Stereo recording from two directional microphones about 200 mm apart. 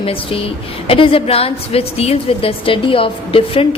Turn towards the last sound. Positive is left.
turn(degrees=25)  # may be behind; listen again after turning